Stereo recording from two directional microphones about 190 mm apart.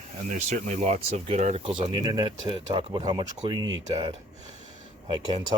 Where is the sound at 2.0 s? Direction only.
20° right (ahead or behind).